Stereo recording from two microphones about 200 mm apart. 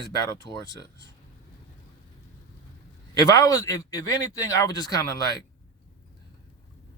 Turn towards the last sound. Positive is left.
turn(degrees=20)  # may be behind; listen again after turning